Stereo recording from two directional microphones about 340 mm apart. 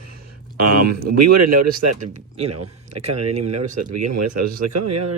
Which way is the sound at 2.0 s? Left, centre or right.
Centre.